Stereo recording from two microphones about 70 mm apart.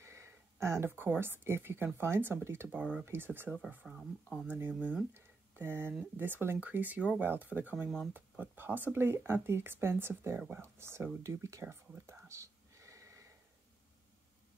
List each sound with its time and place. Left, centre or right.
0.0 s a sound: right
0.9 s speech: right
2.8 s speech: centre
3.1 s speech: right
3.8 s speech: centre
4.6 s speech: right
5.1 s a sound: right
6.1 s speech: right
11.6 s speech: right
12.1 s whispering: right